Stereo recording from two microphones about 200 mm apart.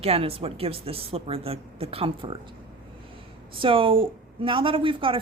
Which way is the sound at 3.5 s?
25° right (ahead or behind).